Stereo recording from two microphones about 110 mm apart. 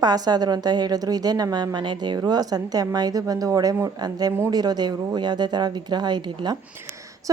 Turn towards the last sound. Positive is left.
turn(degrees=-40)  # may be behind; listen again after turning